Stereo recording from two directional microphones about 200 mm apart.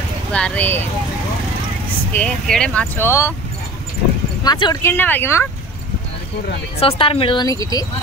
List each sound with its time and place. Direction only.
0.3 s speech: 5° left (ahead or behind)
2.1 s speech: 5° left (ahead or behind)
4.4 s speech: 20° left (ahead or behind)
4.9 s speech: 10° left (ahead or behind)
6.8 s speech: 30° left (ahead or behind)